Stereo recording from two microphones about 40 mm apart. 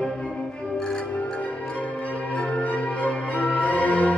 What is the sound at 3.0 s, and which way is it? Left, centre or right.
Change ringing, left.